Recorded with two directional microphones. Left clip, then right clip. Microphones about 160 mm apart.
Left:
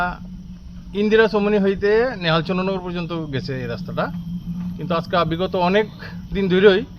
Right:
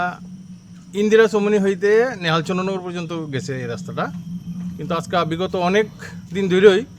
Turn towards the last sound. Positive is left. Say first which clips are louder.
# right 1 dB
turn(degrees=-20)  # may be behind; listen again after turning